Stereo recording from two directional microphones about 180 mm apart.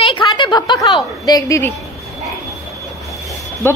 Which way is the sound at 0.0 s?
30° left (ahead or behind).